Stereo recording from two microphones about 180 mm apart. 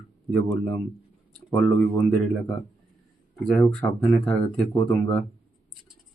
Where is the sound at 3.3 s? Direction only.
Centre (ahead or behind).